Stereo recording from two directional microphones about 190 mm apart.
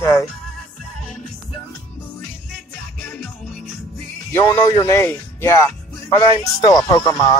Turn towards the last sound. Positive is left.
turn(degrees=20)  # may be behind; listen again after turning